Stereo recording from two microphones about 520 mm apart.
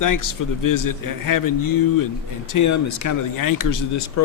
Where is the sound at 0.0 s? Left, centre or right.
Left.